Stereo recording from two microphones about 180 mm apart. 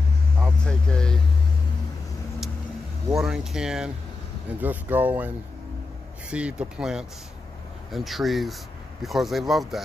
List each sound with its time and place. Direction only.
0.4 s vehicle: 5° left (ahead or behind)
3.2 s speech: 5° right (ahead or behind)
6.3 s speech: 5° right (ahead or behind)